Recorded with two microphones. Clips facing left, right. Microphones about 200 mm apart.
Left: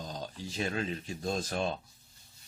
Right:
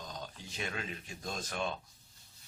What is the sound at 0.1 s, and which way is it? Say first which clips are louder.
Speech: left 6 dB; 35° left (ahead or behind).